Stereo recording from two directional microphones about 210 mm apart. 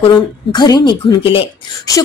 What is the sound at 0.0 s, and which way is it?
Speech, 20° left (ahead or behind).